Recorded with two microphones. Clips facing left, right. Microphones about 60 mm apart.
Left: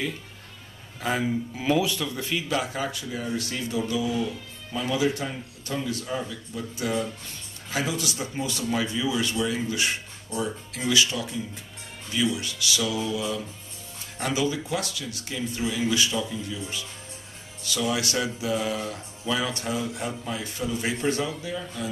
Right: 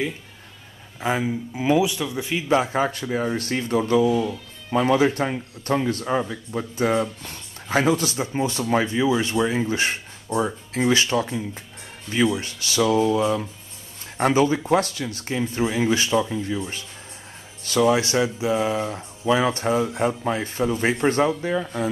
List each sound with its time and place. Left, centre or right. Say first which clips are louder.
1.0 s a man's voice: right 2 dB; centre
2.4 s speech: right 11 dB; right